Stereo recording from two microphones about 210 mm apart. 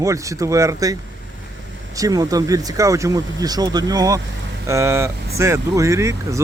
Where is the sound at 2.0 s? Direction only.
15° right (ahead or behind).